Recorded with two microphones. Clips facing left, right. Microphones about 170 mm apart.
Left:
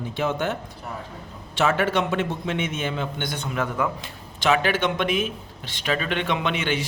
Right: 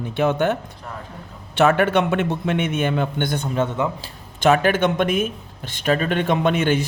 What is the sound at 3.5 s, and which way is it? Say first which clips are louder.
Speech: right 1 dB; 25° right (ahead or behind).